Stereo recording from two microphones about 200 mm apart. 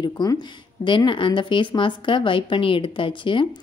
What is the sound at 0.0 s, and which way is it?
Speech, 20° left (ahead or behind).